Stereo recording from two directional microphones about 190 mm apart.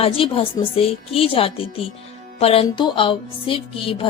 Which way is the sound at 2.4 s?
30° left (ahead or behind).